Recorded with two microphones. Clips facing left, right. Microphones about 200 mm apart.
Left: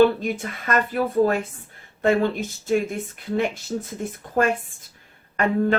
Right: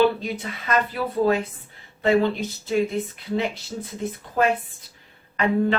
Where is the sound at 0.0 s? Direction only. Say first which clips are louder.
Left 3 dB; 50° left (ahead or behind).